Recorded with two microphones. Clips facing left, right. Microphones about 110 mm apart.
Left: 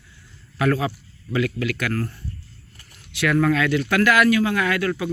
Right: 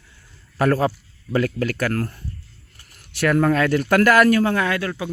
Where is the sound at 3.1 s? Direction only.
40° right (ahead or behind).